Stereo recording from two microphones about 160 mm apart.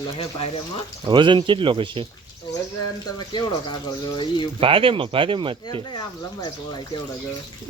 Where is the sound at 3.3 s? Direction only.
25° left (ahead or behind).